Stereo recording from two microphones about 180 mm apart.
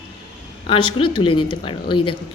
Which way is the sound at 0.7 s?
30° left (ahead or behind).